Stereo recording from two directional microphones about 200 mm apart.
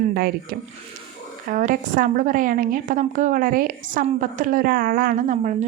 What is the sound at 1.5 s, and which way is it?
A woman's voice, 40° right (ahead or behind).